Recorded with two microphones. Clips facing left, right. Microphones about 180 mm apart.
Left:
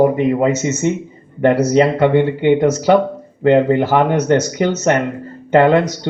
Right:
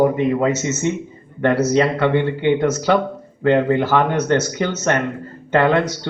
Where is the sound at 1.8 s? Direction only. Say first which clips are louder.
Left 4 dB; 15° left (ahead or behind).